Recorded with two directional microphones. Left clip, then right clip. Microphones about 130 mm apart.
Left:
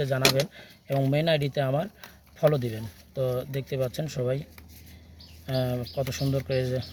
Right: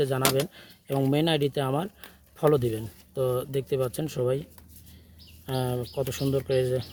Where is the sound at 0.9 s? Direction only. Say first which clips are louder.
Even; 65° right (ahead or behind).